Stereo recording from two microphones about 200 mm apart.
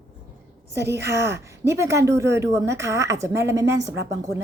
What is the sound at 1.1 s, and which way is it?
A woman's voice, 15° right (ahead or behind).